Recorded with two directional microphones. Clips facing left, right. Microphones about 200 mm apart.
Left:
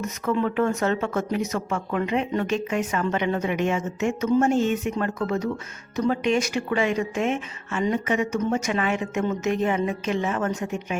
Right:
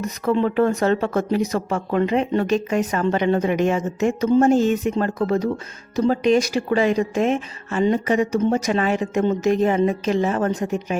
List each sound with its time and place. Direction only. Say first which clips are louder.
0.0 s speech: right 4 dB; 35° right (ahead or behind)